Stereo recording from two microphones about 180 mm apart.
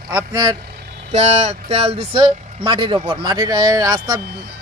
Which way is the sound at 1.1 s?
35° right (ahead or behind).